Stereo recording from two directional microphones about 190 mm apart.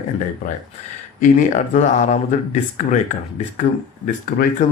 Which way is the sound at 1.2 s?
45° left (ahead or behind).